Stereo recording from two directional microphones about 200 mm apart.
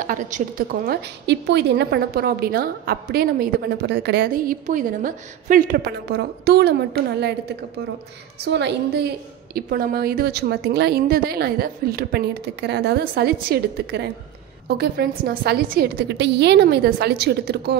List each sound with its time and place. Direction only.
0.0 s a woman's voice: 40° right (ahead or behind)